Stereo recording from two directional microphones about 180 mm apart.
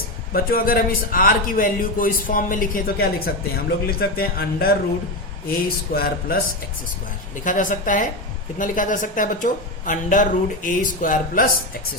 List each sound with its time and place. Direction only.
0.3 s a man's voice: 55° left (ahead or behind)
5.9 s speech: 55° left (ahead or behind)
7.4 s a man's voice: 45° left (ahead or behind)